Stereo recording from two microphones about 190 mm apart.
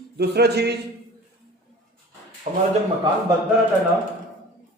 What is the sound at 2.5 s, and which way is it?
Speech, 40° right (ahead or behind).